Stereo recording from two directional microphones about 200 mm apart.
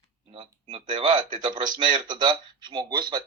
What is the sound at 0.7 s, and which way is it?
Speech, 20° right (ahead or behind).